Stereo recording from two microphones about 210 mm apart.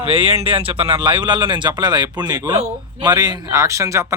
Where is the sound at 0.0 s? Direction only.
25° right (ahead or behind).